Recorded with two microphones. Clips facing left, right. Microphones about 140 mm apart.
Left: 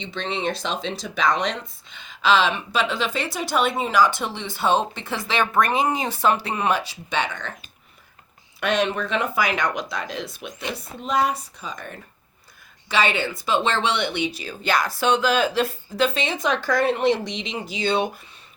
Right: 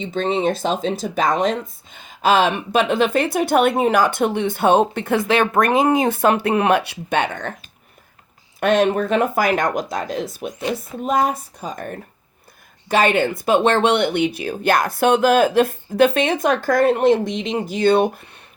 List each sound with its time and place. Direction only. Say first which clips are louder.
0.0 s speech: right 7 dB; 45° right (ahead or behind)
8.6 s speech: right 6 dB; 45° right (ahead or behind)